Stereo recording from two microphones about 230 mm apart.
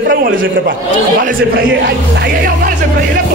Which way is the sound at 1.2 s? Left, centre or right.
Right.